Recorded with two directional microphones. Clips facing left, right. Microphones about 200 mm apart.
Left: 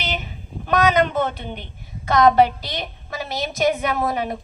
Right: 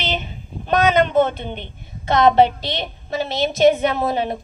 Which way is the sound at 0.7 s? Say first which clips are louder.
Right 2 dB; 25° right (ahead or behind).